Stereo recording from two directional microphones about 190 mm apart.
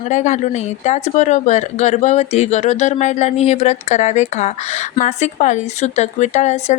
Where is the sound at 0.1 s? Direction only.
35° left (ahead or behind).